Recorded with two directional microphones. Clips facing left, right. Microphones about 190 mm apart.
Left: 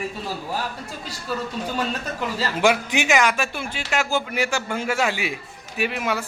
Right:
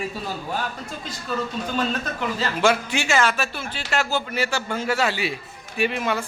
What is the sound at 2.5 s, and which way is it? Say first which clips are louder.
Speech: left 2 dB; 15° left (ahead or behind).